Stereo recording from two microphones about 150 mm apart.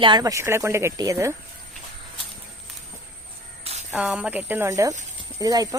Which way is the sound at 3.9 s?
5° right (ahead or behind).